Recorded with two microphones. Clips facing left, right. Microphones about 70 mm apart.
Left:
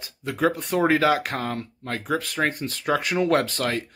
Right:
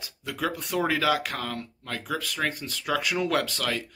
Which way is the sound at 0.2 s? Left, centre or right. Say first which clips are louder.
Left 7 dB; left.